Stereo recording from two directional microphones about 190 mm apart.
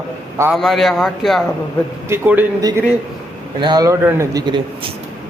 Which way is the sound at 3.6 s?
20° right (ahead or behind).